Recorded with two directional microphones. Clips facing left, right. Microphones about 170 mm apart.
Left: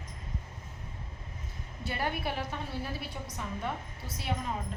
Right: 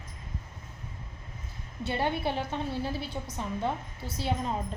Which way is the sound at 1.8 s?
25° right (ahead or behind).